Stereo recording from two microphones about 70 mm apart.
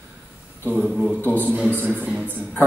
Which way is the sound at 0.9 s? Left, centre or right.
Centre.